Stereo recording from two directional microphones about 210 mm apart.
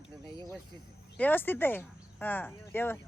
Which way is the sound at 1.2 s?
10° left (ahead or behind).